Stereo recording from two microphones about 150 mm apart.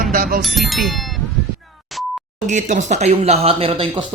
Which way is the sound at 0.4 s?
Centre (ahead or behind).